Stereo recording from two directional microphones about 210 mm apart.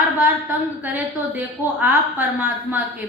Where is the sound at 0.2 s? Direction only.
10° right (ahead or behind).